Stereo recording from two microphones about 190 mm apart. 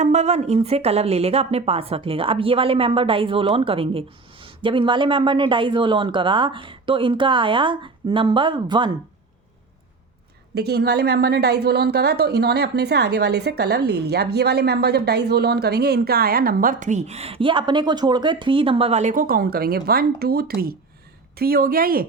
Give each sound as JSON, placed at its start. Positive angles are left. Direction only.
{"t": 0.0, "sound": "a woman's voice", "side_deg": -35}
{"t": 10.5, "sound": "a woman's voice", "side_deg": -60}